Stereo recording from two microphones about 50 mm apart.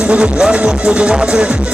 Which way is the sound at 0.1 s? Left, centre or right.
Right.